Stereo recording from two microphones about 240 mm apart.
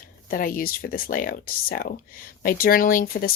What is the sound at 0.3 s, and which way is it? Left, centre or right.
Speech, left.